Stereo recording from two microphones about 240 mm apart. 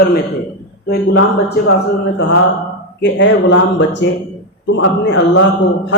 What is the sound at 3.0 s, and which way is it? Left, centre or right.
Speech, left.